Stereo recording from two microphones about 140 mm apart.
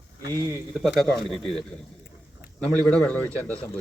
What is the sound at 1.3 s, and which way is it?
Speech, 5° left (ahead or behind).